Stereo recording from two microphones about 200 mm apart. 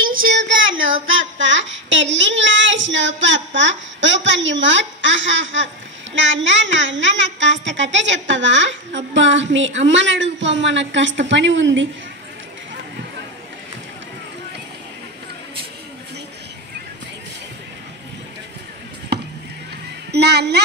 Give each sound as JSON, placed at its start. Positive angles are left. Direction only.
{"t": 0.0, "sound": "child singing", "side_deg": -45}
{"t": 6.1, "sound": "a woman's voice", "side_deg": -65}
{"t": 19.1, "sound": "chop", "side_deg": -55}
{"t": 20.1, "sound": "a woman's voice", "side_deg": -55}